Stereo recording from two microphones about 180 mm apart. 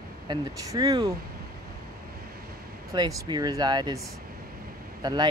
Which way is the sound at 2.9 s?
20° right (ahead or behind).